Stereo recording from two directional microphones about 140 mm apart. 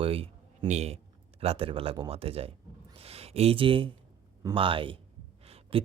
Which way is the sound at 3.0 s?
45° right (ahead or behind).